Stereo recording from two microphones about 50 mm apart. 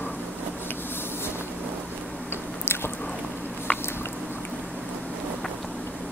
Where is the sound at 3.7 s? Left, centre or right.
Left.